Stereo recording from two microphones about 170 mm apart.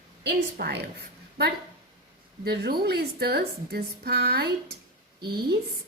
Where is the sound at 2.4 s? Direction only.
70° right (ahead or behind).